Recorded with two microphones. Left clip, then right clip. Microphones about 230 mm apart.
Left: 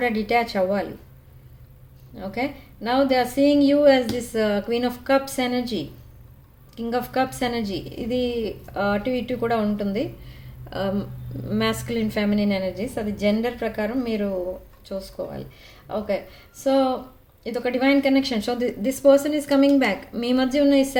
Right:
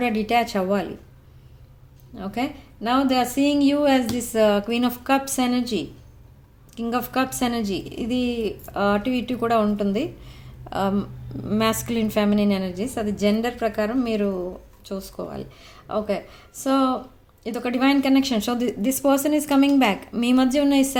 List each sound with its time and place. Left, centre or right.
0.0 s a woman's voice: right
2.1 s a woman's voice: right